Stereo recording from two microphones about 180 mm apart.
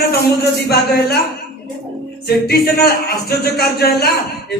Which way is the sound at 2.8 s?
60° left (ahead or behind).